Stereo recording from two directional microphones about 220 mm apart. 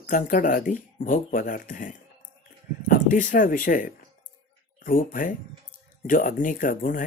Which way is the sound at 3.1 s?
35° left (ahead or behind).